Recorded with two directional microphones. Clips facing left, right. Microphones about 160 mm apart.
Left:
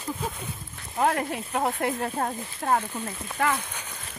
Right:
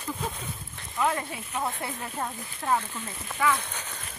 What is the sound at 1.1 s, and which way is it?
Speech, 65° left (ahead or behind).